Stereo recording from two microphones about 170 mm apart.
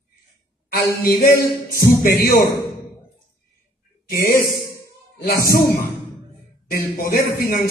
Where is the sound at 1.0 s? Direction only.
60° left (ahead or behind).